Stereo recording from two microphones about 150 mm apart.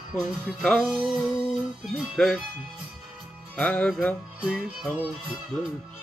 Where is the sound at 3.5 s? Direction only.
10° left (ahead or behind).